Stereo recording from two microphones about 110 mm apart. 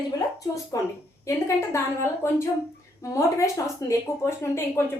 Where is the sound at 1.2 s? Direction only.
25° left (ahead or behind).